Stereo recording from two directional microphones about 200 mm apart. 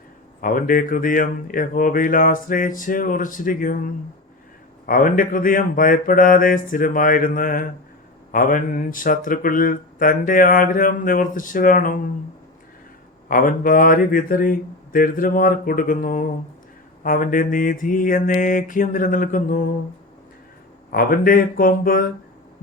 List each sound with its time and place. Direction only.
0.4 s speech: 45° left (ahead or behind)
13.2 s speech: 45° left (ahead or behind)
20.9 s speech: 45° left (ahead or behind)